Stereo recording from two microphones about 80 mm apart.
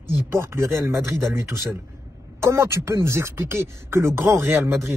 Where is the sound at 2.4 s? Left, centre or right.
Right.